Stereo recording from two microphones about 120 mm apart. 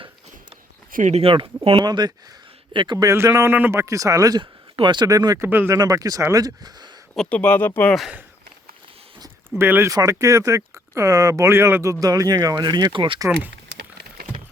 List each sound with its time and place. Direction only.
1.0 s speech: 55° right (ahead or behind)
1.8 s speech: 35° right (ahead or behind)
5.5 s speech: 20° right (ahead or behind)
5.8 s speech: 30° right (ahead or behind)
7.2 s speech: 10° left (ahead or behind)
9.6 s speech: 20° right (ahead or behind); by 13.1 s 45° right (ahead or behind)